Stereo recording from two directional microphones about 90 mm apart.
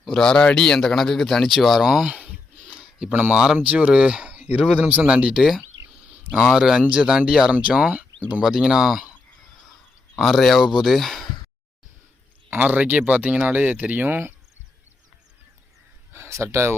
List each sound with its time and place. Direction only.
0.0 s speech: 5° left (ahead or behind)
2.1 s a sound: 15° right (ahead or behind)
3.1 s speech: 15° right (ahead or behind)
8.4 s speech: 5° right (ahead or behind)
10.2 s speech: centre (ahead or behind)
12.5 s speech: 20° right (ahead or behind)
16.1 s speech: 30° right (ahead or behind)